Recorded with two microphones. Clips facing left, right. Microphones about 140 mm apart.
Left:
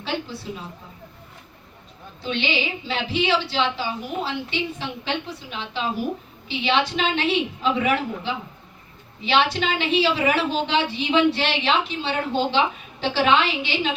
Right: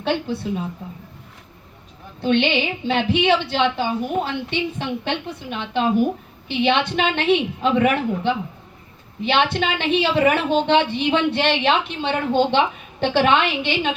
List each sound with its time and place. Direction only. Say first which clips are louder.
0.0 s a woman's voice: right 6 dB; 55° right (ahead or behind)
2.2 s a woman's voice: right 7 dB; 55° right (ahead or behind)